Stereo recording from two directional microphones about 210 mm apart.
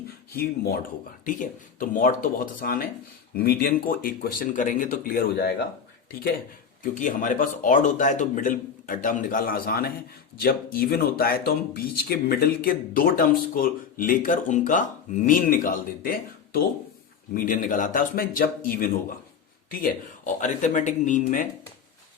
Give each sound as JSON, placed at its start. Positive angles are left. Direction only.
{"t": 0.3, "sound": "speech", "side_deg": 45}
{"t": 6.9, "sound": "speech", "side_deg": 40}